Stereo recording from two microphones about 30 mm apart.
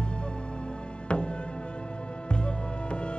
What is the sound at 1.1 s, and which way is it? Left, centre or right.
Music, left.